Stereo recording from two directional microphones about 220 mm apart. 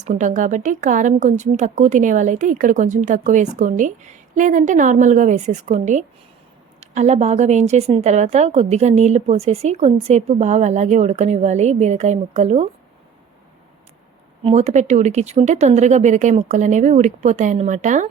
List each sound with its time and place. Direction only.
0.0 s a woman's voice: 35° right (ahead or behind)
14.4 s a woman's voice: 30° right (ahead or behind)